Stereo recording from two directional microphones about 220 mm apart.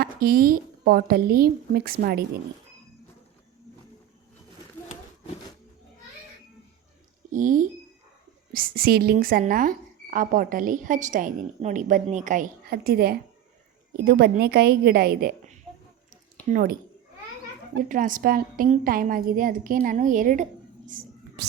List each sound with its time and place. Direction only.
0.0 s a woman's voice: 40° right (ahead or behind)
7.3 s a woman's voice: 35° right (ahead or behind)
17.8 s a woman's voice: 35° right (ahead or behind)